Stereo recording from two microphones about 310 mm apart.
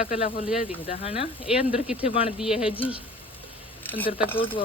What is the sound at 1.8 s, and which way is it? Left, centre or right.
Speech, centre.